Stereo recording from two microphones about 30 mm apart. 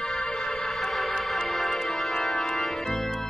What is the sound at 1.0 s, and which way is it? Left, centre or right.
Music, centre.